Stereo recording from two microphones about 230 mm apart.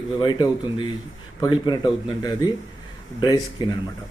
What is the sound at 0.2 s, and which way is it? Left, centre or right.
Speech, centre.